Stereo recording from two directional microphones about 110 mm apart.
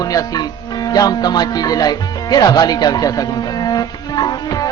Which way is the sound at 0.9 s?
35° left (ahead or behind).